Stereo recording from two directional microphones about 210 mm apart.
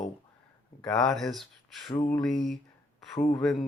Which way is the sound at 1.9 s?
20° left (ahead or behind).